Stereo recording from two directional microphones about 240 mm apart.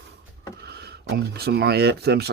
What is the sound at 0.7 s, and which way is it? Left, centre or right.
Speech, right.